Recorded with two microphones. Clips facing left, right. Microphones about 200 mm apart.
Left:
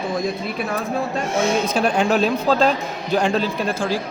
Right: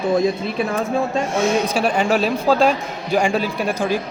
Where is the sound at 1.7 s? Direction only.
5° right (ahead or behind).